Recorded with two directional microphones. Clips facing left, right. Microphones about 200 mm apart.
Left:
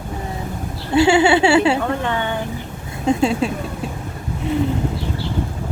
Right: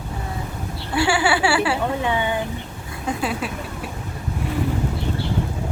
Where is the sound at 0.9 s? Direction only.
25° left (ahead or behind).